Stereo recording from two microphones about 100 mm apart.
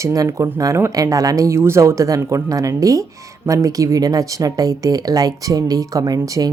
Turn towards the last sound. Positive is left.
turn(degrees=-35)  # may be behind; listen again after turning